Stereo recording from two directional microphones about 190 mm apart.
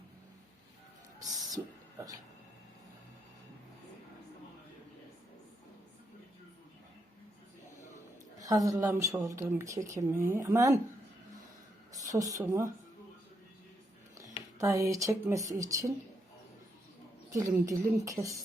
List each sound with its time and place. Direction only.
1.2 s a sound: 20° right (ahead or behind)
8.4 s speech: 20° right (ahead or behind)
11.9 s speech: 20° right (ahead or behind)
14.6 s speech: 15° right (ahead or behind)
17.3 s speech: 15° right (ahead or behind)